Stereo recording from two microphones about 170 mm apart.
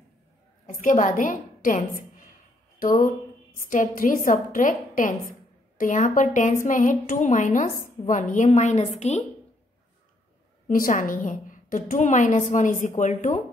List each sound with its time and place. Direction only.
0.7 s a woman's voice: 50° left (ahead or behind)
10.7 s a woman's voice: 50° left (ahead or behind)